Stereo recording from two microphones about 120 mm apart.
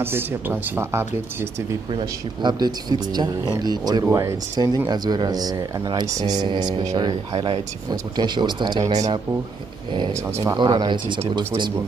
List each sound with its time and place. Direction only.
0.0 s speech: 20° right (ahead or behind)
1.9 s speech: 40° right (ahead or behind)
10.6 s speech: 40° right (ahead or behind)